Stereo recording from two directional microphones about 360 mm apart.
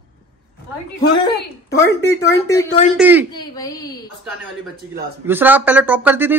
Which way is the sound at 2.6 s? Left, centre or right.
Centre.